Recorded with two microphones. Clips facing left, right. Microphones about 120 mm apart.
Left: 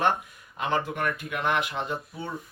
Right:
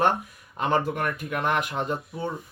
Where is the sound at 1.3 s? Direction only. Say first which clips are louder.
Right 3 dB; 45° right (ahead or behind).